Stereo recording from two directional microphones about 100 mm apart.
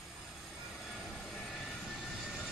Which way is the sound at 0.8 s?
Centre (ahead or behind).